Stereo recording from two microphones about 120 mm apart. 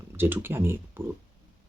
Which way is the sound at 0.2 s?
15° right (ahead or behind).